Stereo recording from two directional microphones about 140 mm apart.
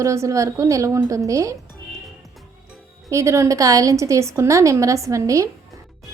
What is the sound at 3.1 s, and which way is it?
A woman's voice, 20° right (ahead or behind).